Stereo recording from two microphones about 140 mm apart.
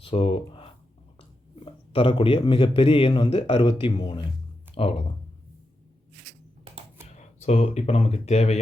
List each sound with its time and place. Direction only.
0.0 s a sound: 40° left (ahead or behind)
1.5 s a man's voice: 40° left (ahead or behind)
7.2 s speech: 45° left (ahead or behind)